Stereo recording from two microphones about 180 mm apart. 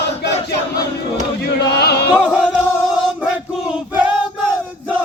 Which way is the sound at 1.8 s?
65° left (ahead or behind).